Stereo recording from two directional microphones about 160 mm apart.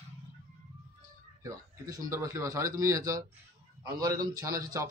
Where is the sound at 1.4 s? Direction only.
20° right (ahead or behind).